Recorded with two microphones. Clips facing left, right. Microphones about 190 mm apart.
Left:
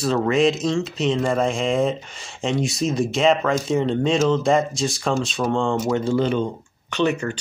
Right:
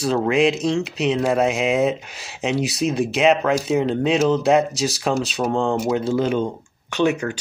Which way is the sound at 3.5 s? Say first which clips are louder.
Right 1 dB; 5° right (ahead or behind).